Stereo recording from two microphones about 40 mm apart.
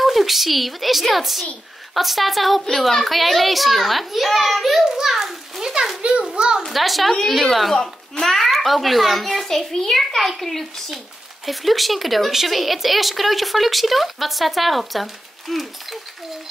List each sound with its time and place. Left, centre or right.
0.0 s a woman's voice: centre
4.9 s a sound: centre
6.7 s a woman's voice: centre